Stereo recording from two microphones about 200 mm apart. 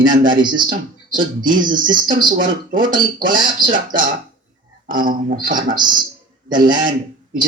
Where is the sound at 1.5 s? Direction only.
40° right (ahead or behind).